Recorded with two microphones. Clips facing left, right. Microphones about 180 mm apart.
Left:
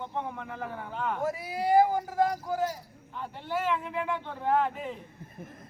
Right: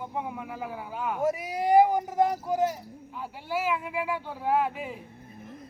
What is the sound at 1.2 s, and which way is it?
Speech, 20° right (ahead or behind).